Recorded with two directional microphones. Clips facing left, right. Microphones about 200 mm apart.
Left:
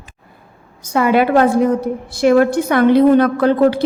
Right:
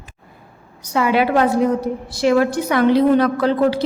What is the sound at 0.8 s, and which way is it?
A woman's voice, 50° left (ahead or behind).